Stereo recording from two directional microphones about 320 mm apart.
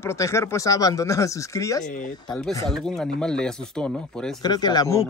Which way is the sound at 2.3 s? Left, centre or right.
Centre.